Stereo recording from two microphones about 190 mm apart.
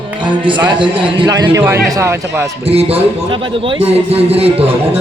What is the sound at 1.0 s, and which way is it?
Speech, 20° right (ahead or behind).